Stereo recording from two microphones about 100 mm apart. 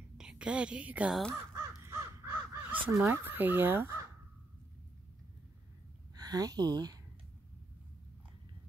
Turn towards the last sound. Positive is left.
turn(degrees=-40)  # may be behind; listen again after turning